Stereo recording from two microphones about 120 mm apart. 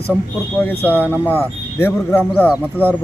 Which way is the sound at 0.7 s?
15° left (ahead or behind).